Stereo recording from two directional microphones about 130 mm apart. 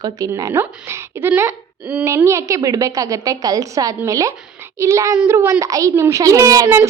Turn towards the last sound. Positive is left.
turn(degrees=-25)  # may be behind; listen again after turning